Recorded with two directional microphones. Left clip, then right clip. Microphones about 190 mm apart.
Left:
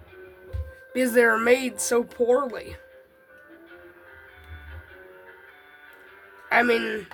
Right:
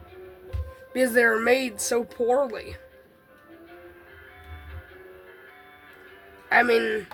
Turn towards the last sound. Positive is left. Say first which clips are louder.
# right 1 dB
turn(degrees=35)  # may be behind; listen again after turning